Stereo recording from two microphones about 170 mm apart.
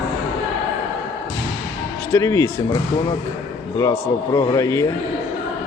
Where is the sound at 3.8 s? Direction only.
20° left (ahead or behind).